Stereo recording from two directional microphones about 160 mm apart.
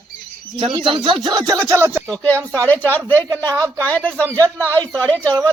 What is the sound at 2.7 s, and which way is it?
Speech, 10° left (ahead or behind).